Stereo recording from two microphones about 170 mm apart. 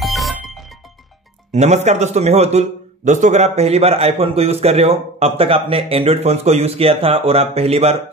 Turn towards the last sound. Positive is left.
turn(degrees=-35)  # may be behind; listen again after turning